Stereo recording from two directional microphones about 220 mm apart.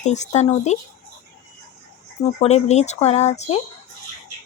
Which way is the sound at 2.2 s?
30° left (ahead or behind).